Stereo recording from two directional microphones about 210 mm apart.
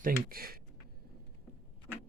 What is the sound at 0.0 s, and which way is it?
Speech, 45° right (ahead or behind).